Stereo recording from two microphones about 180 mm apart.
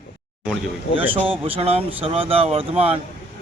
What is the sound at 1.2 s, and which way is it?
Speech, 30° right (ahead or behind).